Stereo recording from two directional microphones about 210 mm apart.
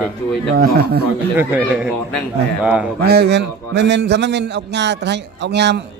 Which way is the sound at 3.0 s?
50° right (ahead or behind).